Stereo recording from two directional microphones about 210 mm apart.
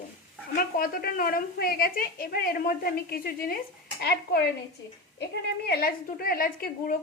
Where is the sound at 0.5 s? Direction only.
40° left (ahead or behind).